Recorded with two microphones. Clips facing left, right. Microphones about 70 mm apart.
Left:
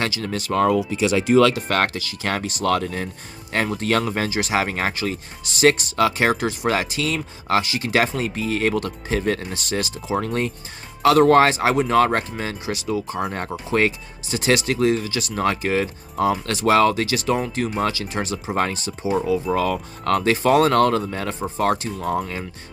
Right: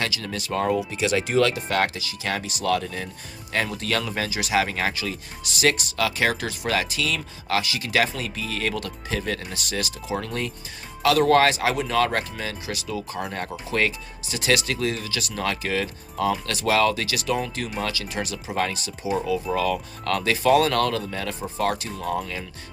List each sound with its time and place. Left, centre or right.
0.0 s speech: left
0.5 s speech: left
1.5 s speech: left